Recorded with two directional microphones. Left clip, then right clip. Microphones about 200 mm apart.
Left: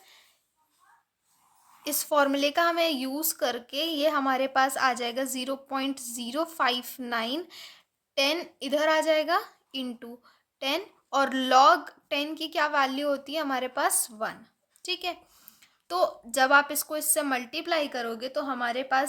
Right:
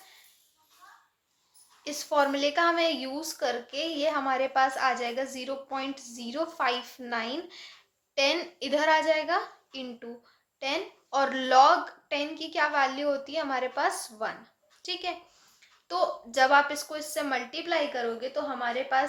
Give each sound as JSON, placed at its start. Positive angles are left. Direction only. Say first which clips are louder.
{"t": 1.8, "sound": "a woman's voice", "louder": "left 1 dB", "side_deg": 50}